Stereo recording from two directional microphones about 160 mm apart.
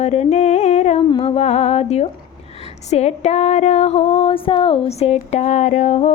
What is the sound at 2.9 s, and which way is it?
Female singing, 45° left (ahead or behind).